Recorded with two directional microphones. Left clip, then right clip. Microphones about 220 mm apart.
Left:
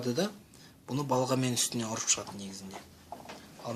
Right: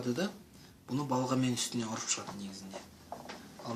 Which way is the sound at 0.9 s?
45° left (ahead or behind).